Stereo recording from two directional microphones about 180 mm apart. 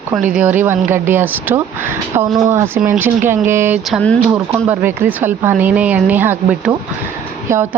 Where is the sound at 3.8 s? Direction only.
5° left (ahead or behind).